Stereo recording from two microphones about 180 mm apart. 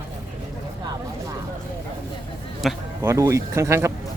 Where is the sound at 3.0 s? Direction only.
15° right (ahead or behind).